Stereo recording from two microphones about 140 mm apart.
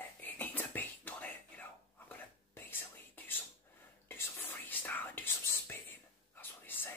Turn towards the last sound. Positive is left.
turn(degrees=15)  # may be behind; listen again after turning